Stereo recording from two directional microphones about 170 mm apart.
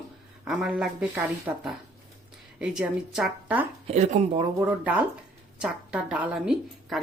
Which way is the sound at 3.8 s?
45° right (ahead or behind).